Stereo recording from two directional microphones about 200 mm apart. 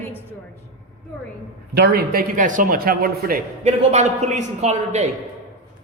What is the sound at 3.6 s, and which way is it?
A man's voice, 35° right (ahead or behind).